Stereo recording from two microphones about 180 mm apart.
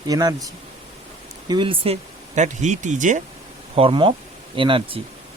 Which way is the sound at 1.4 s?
25° right (ahead or behind).